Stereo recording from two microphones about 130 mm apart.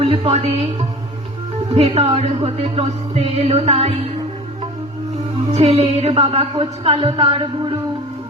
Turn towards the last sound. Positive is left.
turn(degrees=-45)  # may be behind; listen again after turning